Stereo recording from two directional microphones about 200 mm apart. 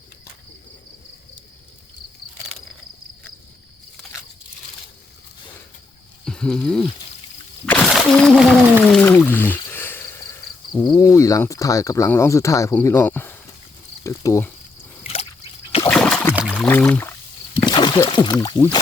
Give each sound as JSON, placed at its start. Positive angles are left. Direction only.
{"t": 6.2, "sound": "speech", "side_deg": 5}
{"t": 7.6, "sound": "a sound", "side_deg": 0}
{"t": 10.8, "sound": "speech", "side_deg": 15}
{"t": 15.0, "sound": "trickle", "side_deg": 30}
{"t": 15.8, "sound": "splash", "side_deg": 5}
{"t": 16.6, "sound": "speech", "side_deg": 10}
{"t": 17.6, "sound": "speech", "side_deg": 20}